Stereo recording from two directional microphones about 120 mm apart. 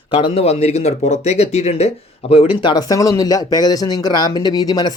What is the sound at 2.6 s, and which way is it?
Speech, 40° left (ahead or behind).